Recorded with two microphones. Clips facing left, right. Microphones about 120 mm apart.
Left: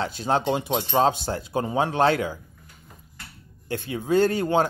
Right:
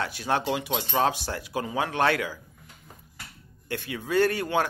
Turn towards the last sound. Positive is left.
turn(degrees=25)  # may be behind; listen again after turning